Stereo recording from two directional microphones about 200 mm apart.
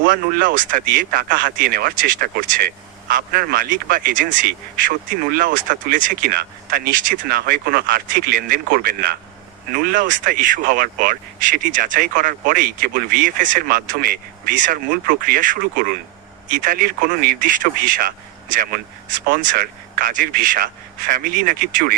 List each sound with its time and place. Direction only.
0.0 s speech: 45° right (ahead or behind)